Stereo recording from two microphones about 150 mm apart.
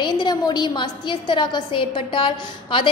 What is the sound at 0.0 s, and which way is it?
A woman's voice, 30° left (ahead or behind).